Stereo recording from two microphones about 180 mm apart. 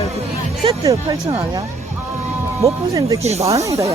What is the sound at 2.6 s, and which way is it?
Speech, 20° right (ahead or behind).